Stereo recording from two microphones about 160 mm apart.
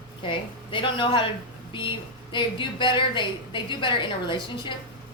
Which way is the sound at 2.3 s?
30° left (ahead or behind).